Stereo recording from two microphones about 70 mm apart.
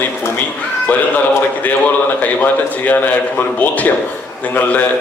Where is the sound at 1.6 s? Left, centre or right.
Left.